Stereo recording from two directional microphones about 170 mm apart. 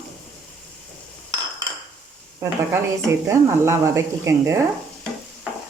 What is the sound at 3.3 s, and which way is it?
Speech, 15° right (ahead or behind).